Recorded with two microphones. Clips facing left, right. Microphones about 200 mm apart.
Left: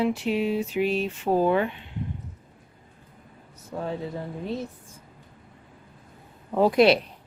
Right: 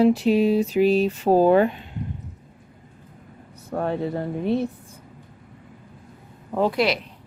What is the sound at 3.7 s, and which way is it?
Speech, 60° right (ahead or behind).